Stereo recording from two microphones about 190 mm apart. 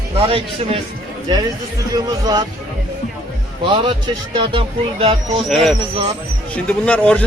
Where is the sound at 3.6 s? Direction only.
25° right (ahead or behind).